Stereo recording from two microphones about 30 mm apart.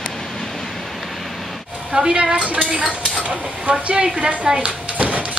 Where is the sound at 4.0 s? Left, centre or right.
Right.